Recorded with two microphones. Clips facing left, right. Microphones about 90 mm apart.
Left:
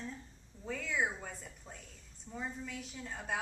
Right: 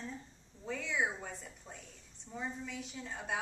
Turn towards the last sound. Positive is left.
turn(degrees=0)  # may be behind; listen again after turning